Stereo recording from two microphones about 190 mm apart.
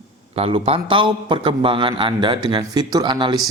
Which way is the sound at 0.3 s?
30° right (ahead or behind).